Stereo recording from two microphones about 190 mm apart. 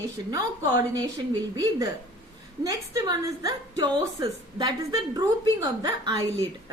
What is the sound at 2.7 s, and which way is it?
A woman's voice, 20° right (ahead or behind).